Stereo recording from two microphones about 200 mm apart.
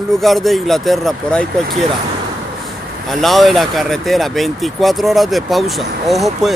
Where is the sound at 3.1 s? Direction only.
Centre (ahead or behind).